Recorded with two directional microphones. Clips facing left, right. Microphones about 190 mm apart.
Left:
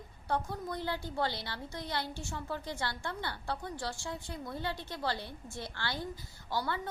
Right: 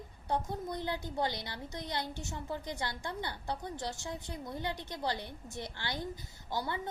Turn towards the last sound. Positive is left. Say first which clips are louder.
# left 1 dB
turn(degrees=-20)  # may be behind; listen again after turning